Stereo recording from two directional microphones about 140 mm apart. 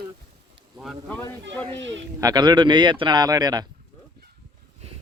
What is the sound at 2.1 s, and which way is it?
Speech, 25° right (ahead or behind).